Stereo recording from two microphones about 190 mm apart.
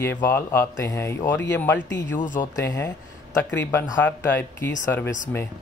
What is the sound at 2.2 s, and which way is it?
Speech, 45° left (ahead or behind).